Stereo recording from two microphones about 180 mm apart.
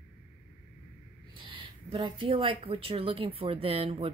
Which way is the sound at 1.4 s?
30° right (ahead or behind).